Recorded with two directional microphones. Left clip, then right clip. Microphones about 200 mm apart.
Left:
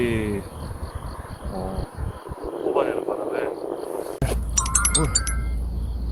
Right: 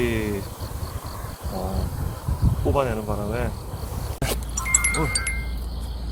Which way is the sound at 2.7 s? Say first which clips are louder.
Left 2 dB; centre (ahead or behind).